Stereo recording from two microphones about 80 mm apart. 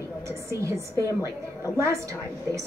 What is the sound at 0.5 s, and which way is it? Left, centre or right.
Speech, right.